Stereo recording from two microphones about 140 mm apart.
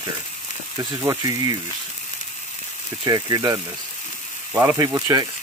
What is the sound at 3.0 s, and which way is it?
Speech, 25° right (ahead or behind).